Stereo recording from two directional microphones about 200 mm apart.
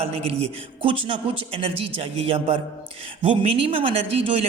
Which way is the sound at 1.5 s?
30° right (ahead or behind).